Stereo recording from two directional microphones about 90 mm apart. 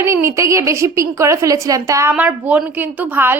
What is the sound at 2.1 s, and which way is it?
A woman's voice, 15° right (ahead or behind).